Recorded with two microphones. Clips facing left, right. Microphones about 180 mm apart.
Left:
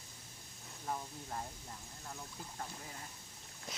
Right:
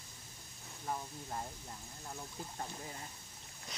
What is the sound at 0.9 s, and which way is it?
Speech, 5° right (ahead or behind).